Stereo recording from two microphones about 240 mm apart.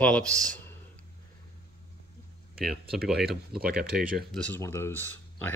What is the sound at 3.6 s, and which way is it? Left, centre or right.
Speech, right.